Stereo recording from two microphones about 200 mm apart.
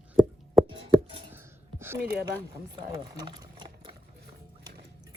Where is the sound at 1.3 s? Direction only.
10° right (ahead or behind).